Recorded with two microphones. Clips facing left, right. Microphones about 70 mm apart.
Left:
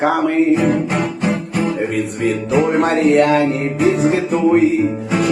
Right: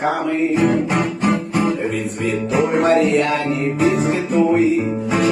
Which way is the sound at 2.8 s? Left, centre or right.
Left.